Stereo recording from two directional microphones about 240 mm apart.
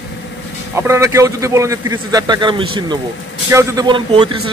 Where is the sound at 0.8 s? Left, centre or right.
Centre.